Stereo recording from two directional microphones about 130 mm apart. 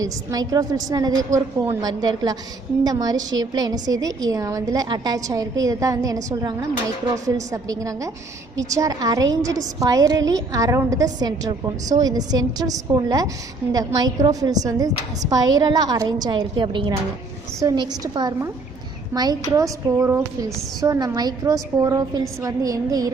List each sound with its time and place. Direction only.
0.0 s a woman's voice: 30° right (ahead or behind)